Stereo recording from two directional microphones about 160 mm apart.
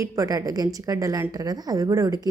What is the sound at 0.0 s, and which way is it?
Speech, 20° right (ahead or behind).